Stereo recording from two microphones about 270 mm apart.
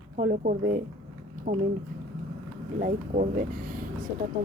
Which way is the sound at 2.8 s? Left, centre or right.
Right.